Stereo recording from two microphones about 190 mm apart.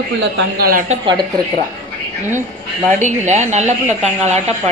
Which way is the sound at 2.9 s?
40° right (ahead or behind).